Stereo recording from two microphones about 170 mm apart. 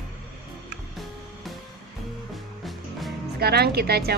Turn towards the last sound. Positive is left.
turn(degrees=-70)  # may be behind; listen again after turning